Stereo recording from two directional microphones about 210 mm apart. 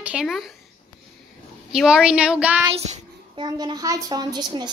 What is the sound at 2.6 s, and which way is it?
Child singing, 30° right (ahead or behind).